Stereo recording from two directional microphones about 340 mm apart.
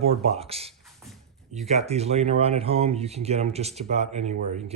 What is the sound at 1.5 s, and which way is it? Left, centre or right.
Speech, centre.